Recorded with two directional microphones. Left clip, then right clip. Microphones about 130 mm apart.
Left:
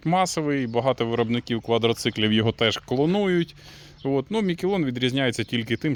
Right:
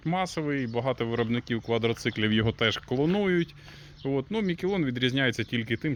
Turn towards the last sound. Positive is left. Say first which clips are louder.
# left 4 dB
turn(degrees=45)  # may be behind; listen again after turning